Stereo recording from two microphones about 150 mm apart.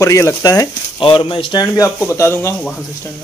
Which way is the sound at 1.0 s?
35° left (ahead or behind).